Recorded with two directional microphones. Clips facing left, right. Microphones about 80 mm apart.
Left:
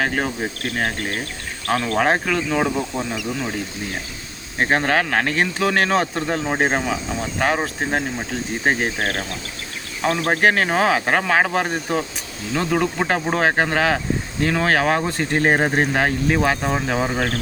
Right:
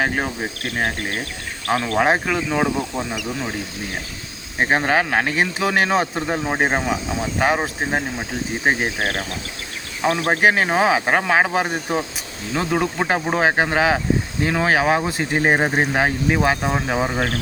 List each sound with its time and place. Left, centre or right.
0.0 s speech: centre
4.5 s speech: centre